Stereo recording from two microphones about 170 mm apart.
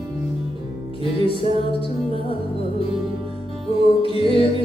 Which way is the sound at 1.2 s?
35° left (ahead or behind).